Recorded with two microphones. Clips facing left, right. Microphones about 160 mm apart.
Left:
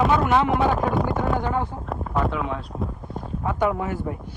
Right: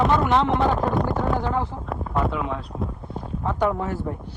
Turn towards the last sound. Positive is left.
turn(degrees=5)  # may be behind; listen again after turning